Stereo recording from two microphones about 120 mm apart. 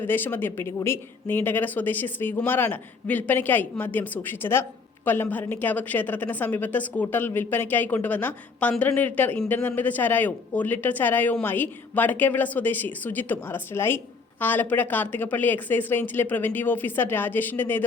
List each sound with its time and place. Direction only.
0.0 s speech: 15° left (ahead or behind)